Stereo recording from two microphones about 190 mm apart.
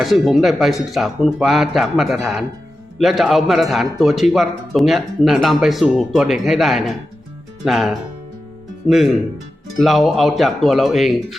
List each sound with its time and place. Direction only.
0.0 s a man's voice: centre (ahead or behind)
9.8 s a man's voice: centre (ahead or behind)